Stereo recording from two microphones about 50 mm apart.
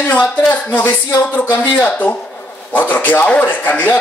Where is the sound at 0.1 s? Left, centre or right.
Left.